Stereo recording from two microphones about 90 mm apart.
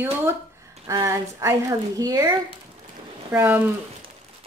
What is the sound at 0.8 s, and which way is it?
A woman's voice, 35° right (ahead or behind).